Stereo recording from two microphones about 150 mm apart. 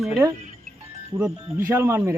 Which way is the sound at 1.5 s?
15° right (ahead or behind).